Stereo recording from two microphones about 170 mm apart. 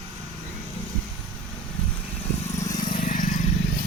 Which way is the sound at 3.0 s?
50° left (ahead or behind).